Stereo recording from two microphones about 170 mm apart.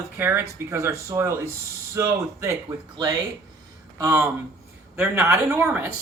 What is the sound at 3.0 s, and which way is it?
Speech, 30° right (ahead or behind).